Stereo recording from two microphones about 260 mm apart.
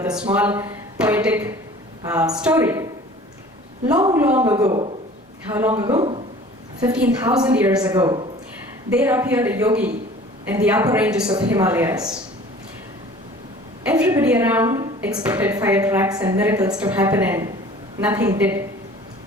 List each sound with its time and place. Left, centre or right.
0.3 s a woman's voice: centre
13.8 s a woman's voice: centre